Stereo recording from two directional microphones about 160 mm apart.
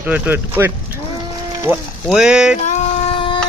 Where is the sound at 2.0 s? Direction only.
5° right (ahead or behind).